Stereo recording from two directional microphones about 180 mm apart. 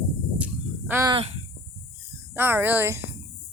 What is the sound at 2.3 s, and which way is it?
Speech, 10° right (ahead or behind).